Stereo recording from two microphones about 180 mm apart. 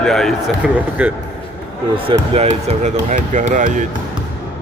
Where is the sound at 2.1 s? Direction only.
30° right (ahead or behind).